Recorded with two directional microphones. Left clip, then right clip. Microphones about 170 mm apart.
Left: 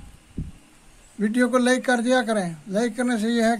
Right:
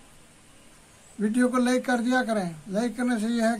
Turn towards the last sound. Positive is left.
turn(degrees=50)  # may be behind; listen again after turning